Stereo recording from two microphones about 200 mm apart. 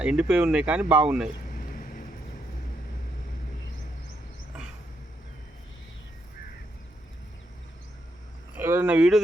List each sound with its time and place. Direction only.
0.0 s speech: 5° right (ahead or behind)
1.5 s vehicle: 45° left (ahead or behind)
8.5 s speech: 10° right (ahead or behind)